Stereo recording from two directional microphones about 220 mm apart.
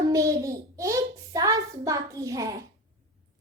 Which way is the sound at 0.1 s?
15° right (ahead or behind).